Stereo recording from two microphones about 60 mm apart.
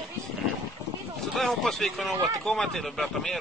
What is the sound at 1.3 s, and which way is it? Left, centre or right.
Speech, centre.